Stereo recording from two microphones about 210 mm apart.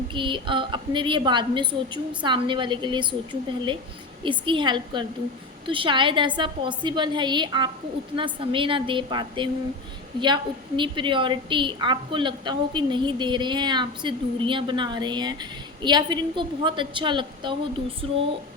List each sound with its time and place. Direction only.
0.1 s a woman's voice: 25° right (ahead or behind)
4.2 s a woman's voice: 25° right (ahead or behind)